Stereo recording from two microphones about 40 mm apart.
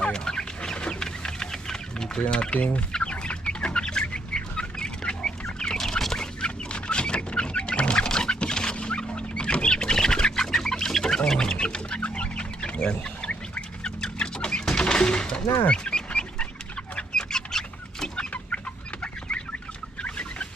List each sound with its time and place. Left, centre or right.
0.0 s chicken: centre
2.2 s speech: left
3.0 s chicken: left
12.9 s bird: left
14.6 s music: centre
15.7 s bird: left
17.1 s bird: centre
20.0 s chicken: left